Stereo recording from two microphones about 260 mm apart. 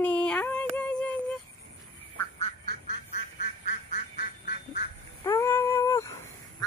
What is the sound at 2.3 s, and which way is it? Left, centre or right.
Quack, left.